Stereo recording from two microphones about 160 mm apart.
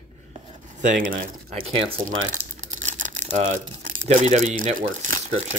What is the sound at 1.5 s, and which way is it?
Speech, 40° right (ahead or behind).